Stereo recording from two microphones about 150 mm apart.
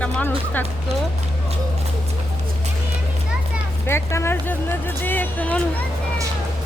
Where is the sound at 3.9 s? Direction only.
15° left (ahead or behind).